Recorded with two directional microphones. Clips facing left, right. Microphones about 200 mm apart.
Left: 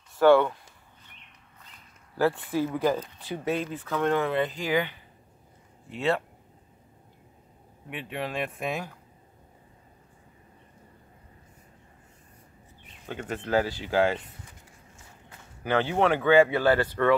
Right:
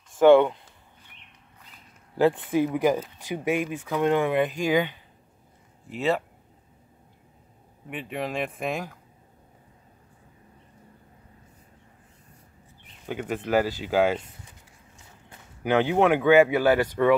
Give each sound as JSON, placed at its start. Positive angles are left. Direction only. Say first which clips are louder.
{"t": 0.2, "sound": "speech", "louder": "right 3 dB", "side_deg": -20}
{"t": 2.1, "sound": "speech", "louder": "right 4 dB", "side_deg": -20}
{"t": 7.9, "sound": "speech", "louder": "right 2 dB", "side_deg": 0}
{"t": 13.0, "sound": "speech", "louder": "right 4 dB", "side_deg": -10}
{"t": 15.6, "sound": "speech", "louder": "right 3 dB", "side_deg": -15}